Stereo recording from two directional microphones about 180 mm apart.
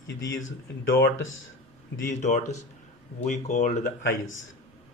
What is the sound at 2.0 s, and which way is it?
Speech, 40° left (ahead or behind).